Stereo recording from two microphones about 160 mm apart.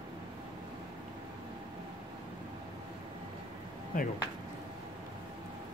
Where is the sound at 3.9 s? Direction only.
55° left (ahead or behind).